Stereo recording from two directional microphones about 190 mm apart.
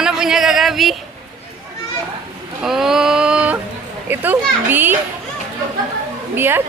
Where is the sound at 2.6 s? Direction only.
Centre (ahead or behind).